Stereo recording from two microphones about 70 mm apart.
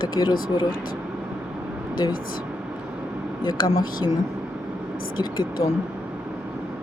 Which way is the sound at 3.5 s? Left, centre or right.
Left.